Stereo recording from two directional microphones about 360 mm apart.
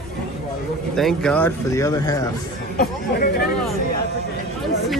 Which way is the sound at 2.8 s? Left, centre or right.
Left.